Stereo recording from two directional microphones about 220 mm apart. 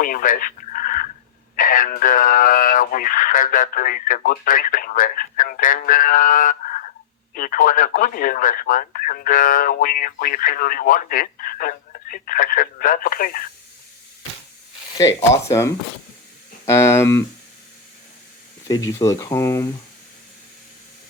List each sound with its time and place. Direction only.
0.0 s a sound: 40° left (ahead or behind)
1.5 s speech: 35° left (ahead or behind)
14.9 s speech: 15° left (ahead or behind)
18.9 s speech: 15° left (ahead or behind)